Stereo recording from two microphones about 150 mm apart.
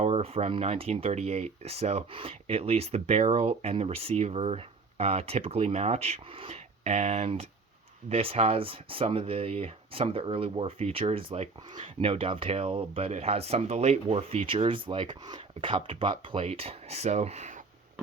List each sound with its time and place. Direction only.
0.0 s speech: 45° right (ahead or behind)